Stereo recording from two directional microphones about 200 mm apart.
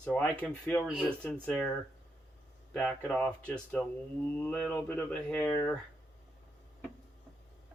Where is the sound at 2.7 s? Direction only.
10° left (ahead or behind).